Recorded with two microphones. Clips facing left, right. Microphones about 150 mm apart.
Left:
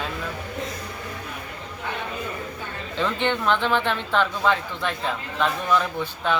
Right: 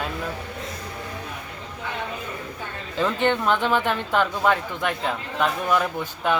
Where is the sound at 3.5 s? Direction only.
10° right (ahead or behind).